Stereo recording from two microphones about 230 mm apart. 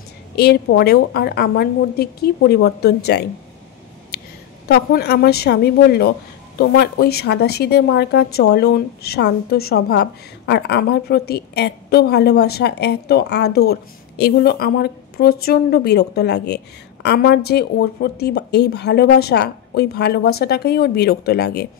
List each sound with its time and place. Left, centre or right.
0.4 s a woman's voice: left
4.6 s a woman's voice: left